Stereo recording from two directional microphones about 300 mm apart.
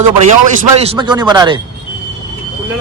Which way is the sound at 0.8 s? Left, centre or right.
Centre.